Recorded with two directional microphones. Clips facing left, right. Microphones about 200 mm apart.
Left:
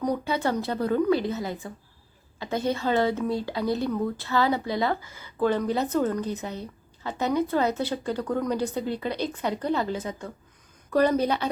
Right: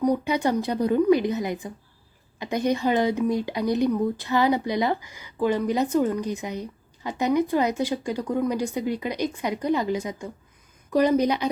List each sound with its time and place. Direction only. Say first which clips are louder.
0.0 s speech: right 4 dB; 15° right (ahead or behind)